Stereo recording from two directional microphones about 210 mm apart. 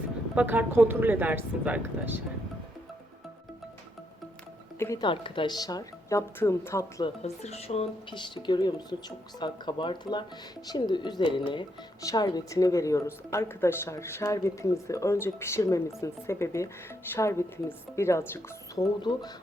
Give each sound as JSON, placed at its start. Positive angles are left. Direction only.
{"t": 0.3, "sound": "speech", "side_deg": -10}
{"t": 4.8, "sound": "a woman's voice", "side_deg": 15}
{"t": 7.2, "sound": "a woman's voice", "side_deg": 30}